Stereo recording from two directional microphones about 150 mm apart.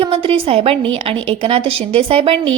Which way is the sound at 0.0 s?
35° right (ahead or behind).